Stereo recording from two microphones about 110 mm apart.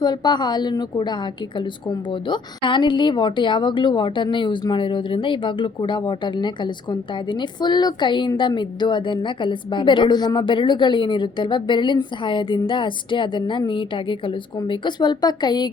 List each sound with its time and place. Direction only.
0.0 s a woman's voice: 40° left (ahead or behind)